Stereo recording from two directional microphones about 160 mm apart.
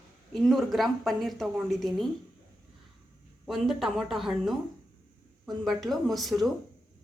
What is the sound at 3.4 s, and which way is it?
A woman's voice, centre (ahead or behind).